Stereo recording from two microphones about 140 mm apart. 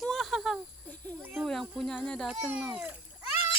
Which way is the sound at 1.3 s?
Centre (ahead or behind).